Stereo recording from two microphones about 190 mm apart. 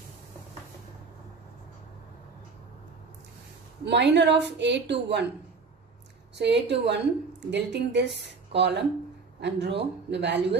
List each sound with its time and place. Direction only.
3.8 s a woman's voice: 65° right (ahead or behind)
6.3 s a woman's voice: 65° right (ahead or behind)